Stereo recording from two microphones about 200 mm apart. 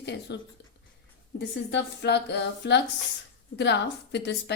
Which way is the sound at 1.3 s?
60° left (ahead or behind).